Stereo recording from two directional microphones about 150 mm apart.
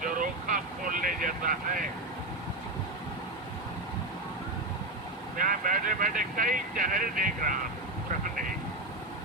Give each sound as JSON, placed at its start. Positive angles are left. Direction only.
{"t": 0.0, "sound": "vehicle", "side_deg": -65}
{"t": 5.4, "sound": "speech", "side_deg": -65}